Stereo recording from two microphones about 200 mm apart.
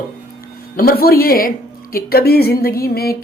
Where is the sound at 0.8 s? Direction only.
50° left (ahead or behind).